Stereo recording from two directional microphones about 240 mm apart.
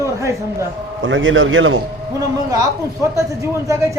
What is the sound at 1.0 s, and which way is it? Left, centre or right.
Speech, right.